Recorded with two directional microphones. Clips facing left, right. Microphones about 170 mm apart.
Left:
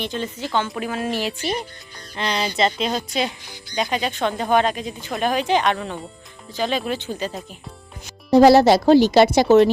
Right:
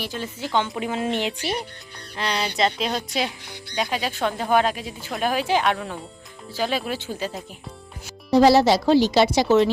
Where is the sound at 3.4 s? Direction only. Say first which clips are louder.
Right 2 dB; 65° right (ahead or behind).